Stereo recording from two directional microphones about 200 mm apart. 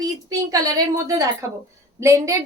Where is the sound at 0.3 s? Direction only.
20° right (ahead or behind).